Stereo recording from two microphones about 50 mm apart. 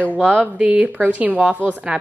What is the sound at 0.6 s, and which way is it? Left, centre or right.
Speech, right.